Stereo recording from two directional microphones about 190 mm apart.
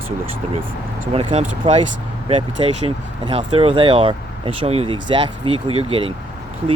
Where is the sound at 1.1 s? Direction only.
30° right (ahead or behind).